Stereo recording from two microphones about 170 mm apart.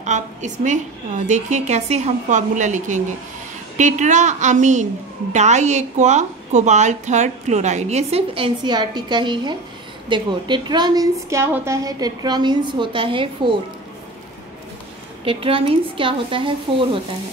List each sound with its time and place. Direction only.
0.0 s a woman's voice: 45° right (ahead or behind)
15.2 s a woman's voice: 30° right (ahead or behind)